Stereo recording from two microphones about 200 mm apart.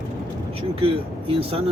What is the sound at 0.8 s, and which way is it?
Speech, 30° right (ahead or behind).